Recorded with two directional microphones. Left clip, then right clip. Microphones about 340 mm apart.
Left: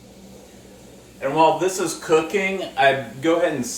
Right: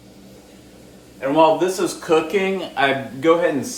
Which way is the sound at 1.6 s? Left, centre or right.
Centre.